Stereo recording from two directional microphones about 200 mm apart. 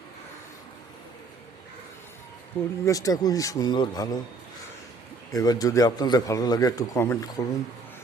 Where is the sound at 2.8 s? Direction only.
15° left (ahead or behind).